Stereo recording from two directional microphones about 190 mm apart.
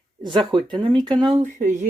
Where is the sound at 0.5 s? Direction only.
25° right (ahead or behind).